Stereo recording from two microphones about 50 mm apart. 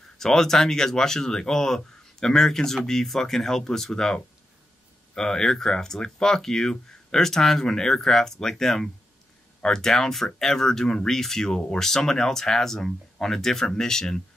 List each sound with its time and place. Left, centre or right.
0.2 s speech: centre